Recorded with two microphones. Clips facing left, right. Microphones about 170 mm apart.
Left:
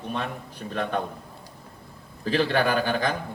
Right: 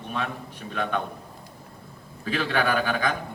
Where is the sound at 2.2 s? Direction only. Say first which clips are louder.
Left 3 dB; 30° left (ahead or behind).